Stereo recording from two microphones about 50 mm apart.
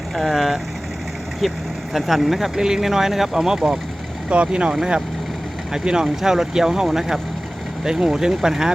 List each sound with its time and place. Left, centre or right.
0.2 s speech: centre
5.7 s speech: centre